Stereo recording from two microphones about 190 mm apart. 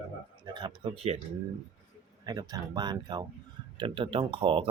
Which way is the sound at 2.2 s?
20° right (ahead or behind).